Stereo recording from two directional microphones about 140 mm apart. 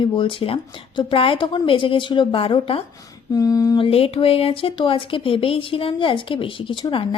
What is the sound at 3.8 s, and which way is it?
Speech, 40° left (ahead or behind).